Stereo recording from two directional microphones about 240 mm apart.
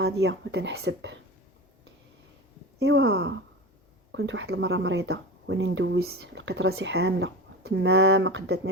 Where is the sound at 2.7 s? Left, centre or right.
Right.